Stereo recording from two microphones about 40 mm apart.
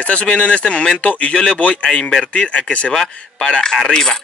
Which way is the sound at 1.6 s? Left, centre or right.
Left.